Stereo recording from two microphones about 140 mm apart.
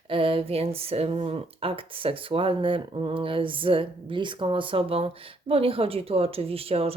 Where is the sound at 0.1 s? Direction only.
40° right (ahead or behind).